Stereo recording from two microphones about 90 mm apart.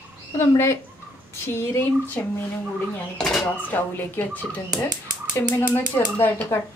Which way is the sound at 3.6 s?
20° left (ahead or behind).